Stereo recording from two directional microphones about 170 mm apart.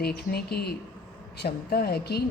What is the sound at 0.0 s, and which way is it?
A woman's voice, 65° left (ahead or behind).